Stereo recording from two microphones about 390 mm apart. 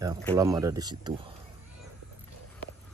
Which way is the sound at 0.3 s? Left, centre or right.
Centre.